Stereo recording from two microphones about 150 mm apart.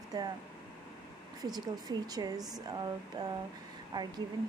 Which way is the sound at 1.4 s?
25° right (ahead or behind).